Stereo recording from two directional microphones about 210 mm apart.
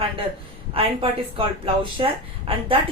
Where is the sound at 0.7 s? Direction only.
25° right (ahead or behind).